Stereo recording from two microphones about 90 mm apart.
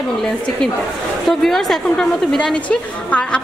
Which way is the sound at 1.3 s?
5° left (ahead or behind).